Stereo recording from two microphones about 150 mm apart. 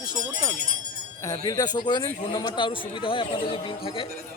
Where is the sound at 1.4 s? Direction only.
25° left (ahead or behind).